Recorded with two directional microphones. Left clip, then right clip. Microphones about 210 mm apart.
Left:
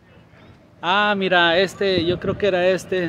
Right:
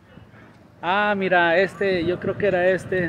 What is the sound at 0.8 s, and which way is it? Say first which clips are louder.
Speech: left 2 dB; 20° left (ahead or behind).